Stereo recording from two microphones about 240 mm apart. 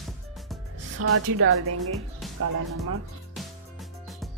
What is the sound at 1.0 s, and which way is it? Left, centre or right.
Speech, right.